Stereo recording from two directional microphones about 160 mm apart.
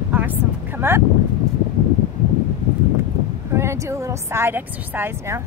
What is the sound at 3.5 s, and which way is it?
Speech, 20° right (ahead or behind).